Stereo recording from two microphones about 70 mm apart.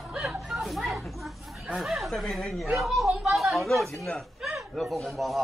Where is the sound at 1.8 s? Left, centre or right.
Centre.